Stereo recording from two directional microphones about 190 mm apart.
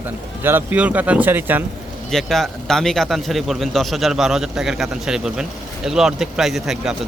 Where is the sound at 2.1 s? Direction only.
Centre (ahead or behind).